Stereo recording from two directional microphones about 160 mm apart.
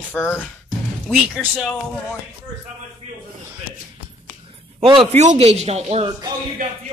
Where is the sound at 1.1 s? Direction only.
Centre (ahead or behind).